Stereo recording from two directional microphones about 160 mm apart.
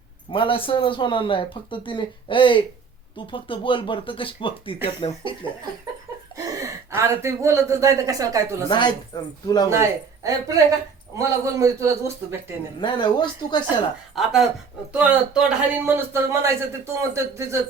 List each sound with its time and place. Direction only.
0.3 s a man's voice: 30° left (ahead or behind)
6.3 s speech: 20° right (ahead or behind)
8.7 s speech: 25° left (ahead or behind)
9.6 s speech: 20° right (ahead or behind)
12.8 s speech: 30° left (ahead or behind)
14.2 s a man's voice: centre (ahead or behind); by 17.6 s 20° right (ahead or behind)